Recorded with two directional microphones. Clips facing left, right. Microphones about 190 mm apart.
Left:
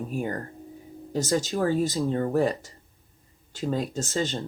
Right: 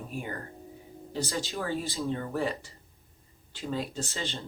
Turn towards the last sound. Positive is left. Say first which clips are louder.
# left 8 dB
turn(degrees=45)  # may be behind; listen again after turning